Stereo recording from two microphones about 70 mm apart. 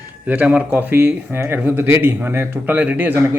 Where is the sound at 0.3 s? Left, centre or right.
Centre.